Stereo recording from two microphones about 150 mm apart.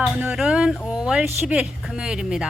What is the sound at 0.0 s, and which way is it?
Speech, 5° right (ahead or behind).